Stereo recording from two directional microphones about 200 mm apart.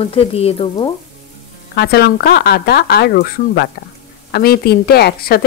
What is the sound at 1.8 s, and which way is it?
Speech, 55° left (ahead or behind).